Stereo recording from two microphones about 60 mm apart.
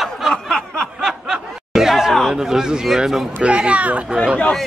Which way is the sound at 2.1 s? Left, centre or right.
Centre.